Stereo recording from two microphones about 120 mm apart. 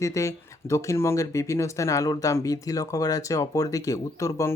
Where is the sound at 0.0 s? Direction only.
25° left (ahead or behind).